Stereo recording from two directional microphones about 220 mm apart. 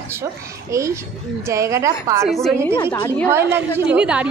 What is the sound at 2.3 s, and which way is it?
A woman's voice, centre (ahead or behind).